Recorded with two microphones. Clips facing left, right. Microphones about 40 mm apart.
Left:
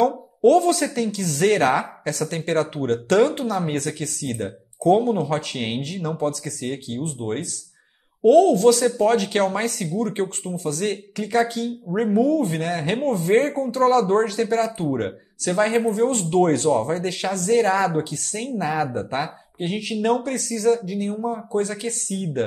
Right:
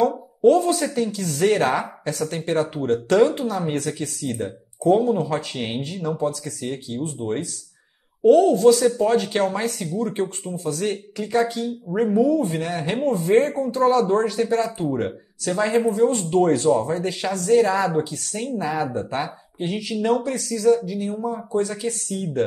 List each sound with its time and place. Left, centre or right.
0.4 s speech: left
8.2 s speech: left
22.1 s speech: centre